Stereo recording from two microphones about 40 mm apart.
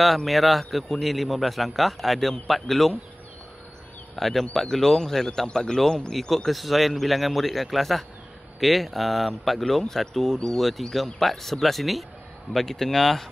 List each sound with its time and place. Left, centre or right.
0.0 s a man's voice: centre
4.1 s speech: centre
6.3 s a man's voice: centre